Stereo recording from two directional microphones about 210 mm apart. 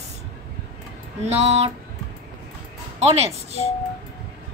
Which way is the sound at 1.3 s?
30° right (ahead or behind).